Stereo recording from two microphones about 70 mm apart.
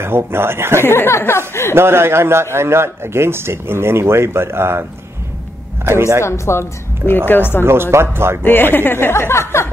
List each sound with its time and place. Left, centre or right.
0.0 s speech: right
0.8 s a woman's voice: left
1.8 s speech: right
5.9 s speech: right
6.2 s a woman's voice: left
7.6 s speech: right
8.5 s a woman's voice: left